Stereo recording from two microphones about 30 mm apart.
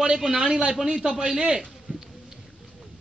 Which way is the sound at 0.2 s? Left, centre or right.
Centre.